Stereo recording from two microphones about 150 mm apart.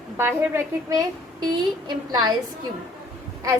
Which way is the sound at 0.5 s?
25° right (ahead or behind).